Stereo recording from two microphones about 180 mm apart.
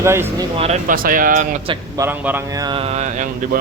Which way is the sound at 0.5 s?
35° right (ahead or behind).